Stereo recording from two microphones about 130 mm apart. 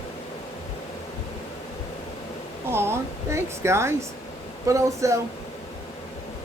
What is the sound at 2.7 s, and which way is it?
A woman's voice, 20° right (ahead or behind).